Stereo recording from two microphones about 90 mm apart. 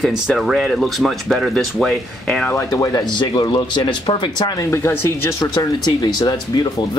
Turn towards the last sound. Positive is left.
turn(degrees=45)  # may be behind; listen again after turning